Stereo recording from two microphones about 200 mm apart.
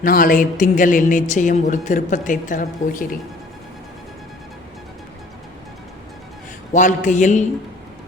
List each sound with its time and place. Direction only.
0.0 s a woman's voice: 45° left (ahead or behind)
6.7 s a woman's voice: 40° left (ahead or behind)